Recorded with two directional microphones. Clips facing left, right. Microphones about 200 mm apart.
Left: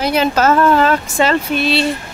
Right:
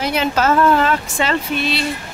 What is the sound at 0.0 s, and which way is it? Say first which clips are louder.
Speech: left 4 dB; 40° left (ahead or behind).